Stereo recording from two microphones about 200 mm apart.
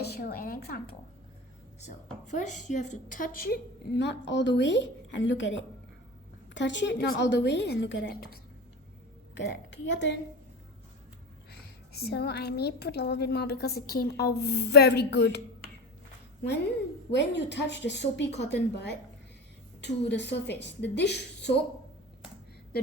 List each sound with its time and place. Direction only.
0.0 s a woman's voice: 50° left (ahead or behind)
2.2 s a woman's voice: 35° left (ahead or behind)
9.4 s a woman's voice: 65° left (ahead or behind)
11.5 s a woman's voice: 50° left (ahead or behind)
17.1 s a woman's voice: 60° left (ahead or behind)